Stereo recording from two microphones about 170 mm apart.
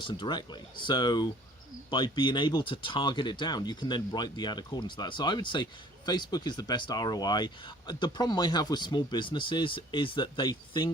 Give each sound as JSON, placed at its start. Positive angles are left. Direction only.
{"t": 0.0, "sound": "speech", "side_deg": 25}